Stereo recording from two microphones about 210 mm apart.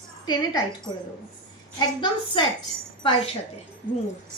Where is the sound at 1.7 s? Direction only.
20° left (ahead or behind).